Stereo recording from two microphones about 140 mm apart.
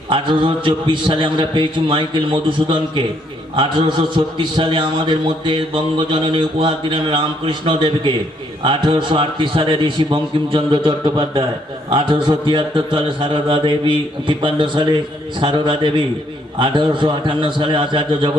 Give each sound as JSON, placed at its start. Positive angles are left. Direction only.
{"t": 0.1, "sound": "a man's voice", "side_deg": -35}